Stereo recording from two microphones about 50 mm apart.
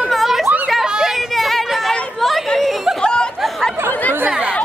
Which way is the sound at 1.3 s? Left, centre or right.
Centre.